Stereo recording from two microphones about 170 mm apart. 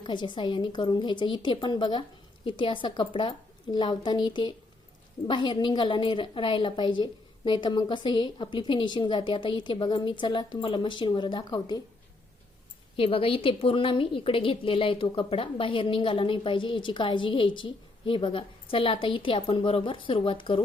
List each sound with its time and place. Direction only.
0.0 s a woman's voice: 25° left (ahead or behind)
13.0 s a woman's voice: 35° left (ahead or behind)